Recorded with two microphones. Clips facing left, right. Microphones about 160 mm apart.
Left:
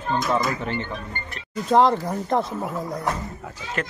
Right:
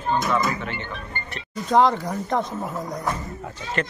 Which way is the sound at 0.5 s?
35° left (ahead or behind).